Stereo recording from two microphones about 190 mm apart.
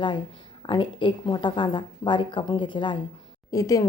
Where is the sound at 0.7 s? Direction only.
25° left (ahead or behind).